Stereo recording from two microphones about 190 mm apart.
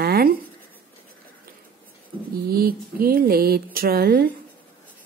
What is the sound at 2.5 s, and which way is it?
A woman's voice, 50° right (ahead or behind).